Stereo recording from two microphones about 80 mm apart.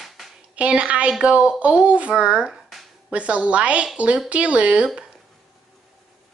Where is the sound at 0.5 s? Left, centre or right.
Centre.